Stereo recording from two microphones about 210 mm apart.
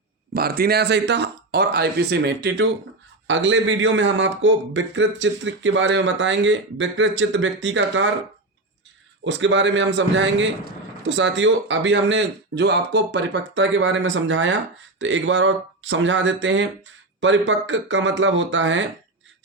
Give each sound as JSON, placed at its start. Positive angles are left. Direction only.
{"t": 0.3, "sound": "a man's voice", "side_deg": -45}
{"t": 9.2, "sound": "a man's voice", "side_deg": -60}